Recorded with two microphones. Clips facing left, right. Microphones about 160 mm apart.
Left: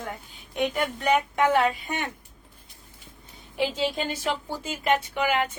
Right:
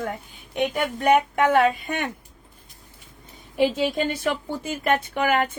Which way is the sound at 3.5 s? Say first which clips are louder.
Right 5 dB; 55° right (ahead or behind).